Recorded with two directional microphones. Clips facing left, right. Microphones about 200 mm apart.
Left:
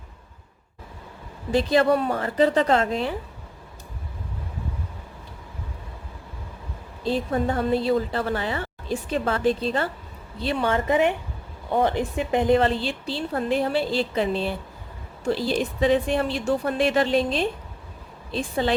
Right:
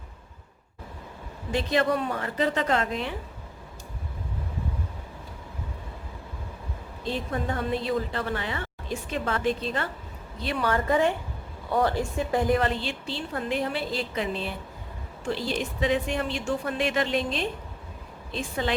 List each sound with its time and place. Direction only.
1.5 s a woman's voice: 35° left (ahead or behind)
7.0 s a woman's voice: 35° left (ahead or behind)